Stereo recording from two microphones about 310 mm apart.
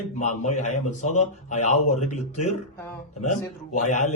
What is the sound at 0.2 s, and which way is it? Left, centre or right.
A man's voice, left.